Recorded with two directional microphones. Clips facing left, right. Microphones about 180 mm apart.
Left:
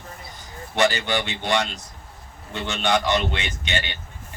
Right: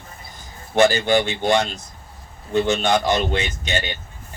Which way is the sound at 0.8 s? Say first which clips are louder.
Right 6 dB; 45° right (ahead or behind).